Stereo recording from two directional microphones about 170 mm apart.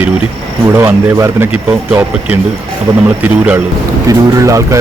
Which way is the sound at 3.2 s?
10° right (ahead or behind).